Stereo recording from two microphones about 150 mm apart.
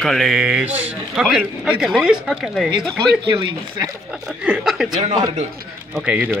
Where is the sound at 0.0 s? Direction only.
Centre (ahead or behind).